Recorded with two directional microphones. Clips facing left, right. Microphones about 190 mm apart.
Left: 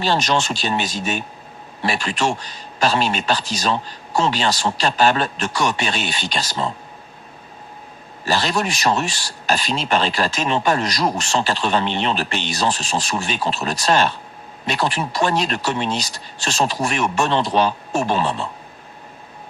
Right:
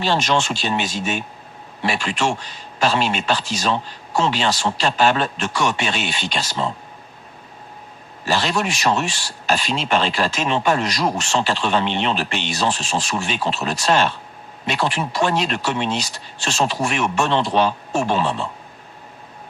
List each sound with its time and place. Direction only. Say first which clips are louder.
0.0 s a man's voice: even; 40° left (ahead or behind)
8.2 s a man's voice: even; 40° left (ahead or behind)